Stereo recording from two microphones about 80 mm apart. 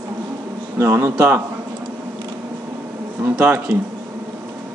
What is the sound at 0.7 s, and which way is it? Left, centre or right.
Speech, right.